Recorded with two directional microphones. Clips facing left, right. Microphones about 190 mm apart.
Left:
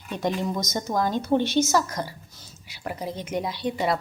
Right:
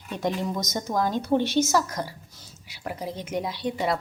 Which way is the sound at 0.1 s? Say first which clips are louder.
Left 1 dB; 5° right (ahead or behind).